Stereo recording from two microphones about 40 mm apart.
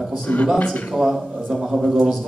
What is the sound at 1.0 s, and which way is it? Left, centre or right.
Speech, centre.